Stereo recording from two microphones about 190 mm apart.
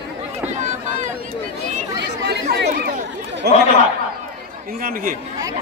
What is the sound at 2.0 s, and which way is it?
Chatter, 65° right (ahead or behind).